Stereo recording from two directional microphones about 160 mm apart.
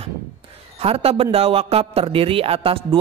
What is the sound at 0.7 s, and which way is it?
A man's voice, 40° right (ahead or behind).